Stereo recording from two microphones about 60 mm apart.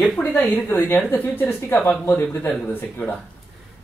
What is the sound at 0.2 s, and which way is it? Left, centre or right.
Speech, left.